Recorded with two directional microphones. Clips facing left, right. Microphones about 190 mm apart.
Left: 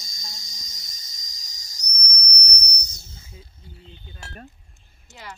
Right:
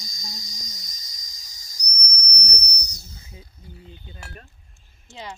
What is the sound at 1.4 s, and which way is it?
Whistle, 25° left (ahead or behind).